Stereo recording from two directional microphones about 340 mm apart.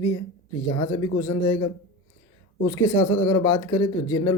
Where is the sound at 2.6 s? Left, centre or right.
Centre.